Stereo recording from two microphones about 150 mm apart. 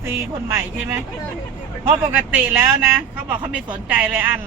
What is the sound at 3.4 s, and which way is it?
Speech, 5° right (ahead or behind).